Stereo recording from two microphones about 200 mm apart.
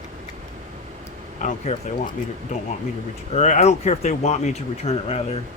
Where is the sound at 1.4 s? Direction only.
30° left (ahead or behind).